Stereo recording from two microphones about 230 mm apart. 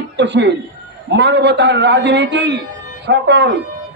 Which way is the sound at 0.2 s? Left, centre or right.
Right.